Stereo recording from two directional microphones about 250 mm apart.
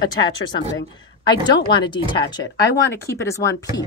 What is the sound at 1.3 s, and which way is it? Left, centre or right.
A woman's voice, centre.